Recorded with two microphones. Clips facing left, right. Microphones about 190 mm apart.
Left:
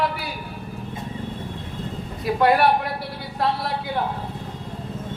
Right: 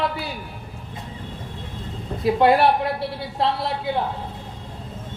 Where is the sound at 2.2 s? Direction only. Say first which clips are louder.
Right 2 dB; 25° right (ahead or behind).